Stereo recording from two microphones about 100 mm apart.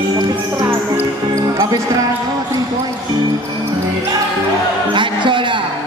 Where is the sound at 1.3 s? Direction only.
35° right (ahead or behind).